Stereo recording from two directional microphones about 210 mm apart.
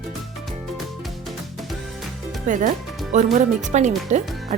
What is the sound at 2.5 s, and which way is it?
Speech, 35° right (ahead or behind).